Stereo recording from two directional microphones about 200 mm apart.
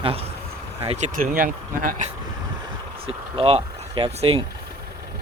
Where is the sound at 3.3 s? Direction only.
30° right (ahead or behind).